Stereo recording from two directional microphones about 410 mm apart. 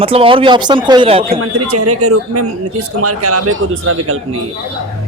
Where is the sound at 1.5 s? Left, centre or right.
Right.